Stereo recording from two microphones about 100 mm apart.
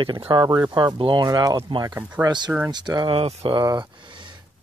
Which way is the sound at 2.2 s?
45° right (ahead or behind).